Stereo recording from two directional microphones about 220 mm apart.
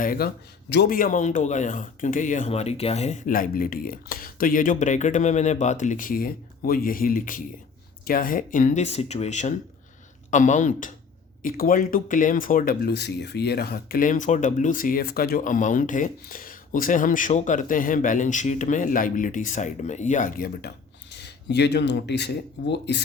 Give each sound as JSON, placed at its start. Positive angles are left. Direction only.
{"t": 0.0, "sound": "speech", "side_deg": 40}